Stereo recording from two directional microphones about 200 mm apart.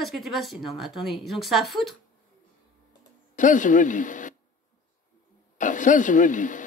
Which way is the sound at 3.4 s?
40° left (ahead or behind).